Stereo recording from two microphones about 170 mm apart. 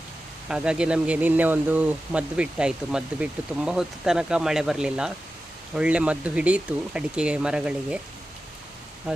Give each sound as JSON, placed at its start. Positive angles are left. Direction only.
{"t": 0.4, "sound": "speech", "side_deg": -5}